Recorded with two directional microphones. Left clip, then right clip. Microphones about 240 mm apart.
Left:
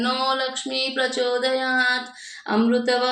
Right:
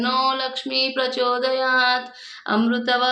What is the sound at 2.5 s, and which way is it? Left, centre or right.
Speech, centre.